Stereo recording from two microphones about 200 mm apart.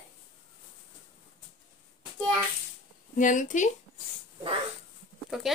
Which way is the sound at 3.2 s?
40° left (ahead or behind).